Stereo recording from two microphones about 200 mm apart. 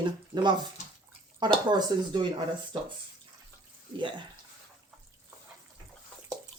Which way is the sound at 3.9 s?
25° right (ahead or behind).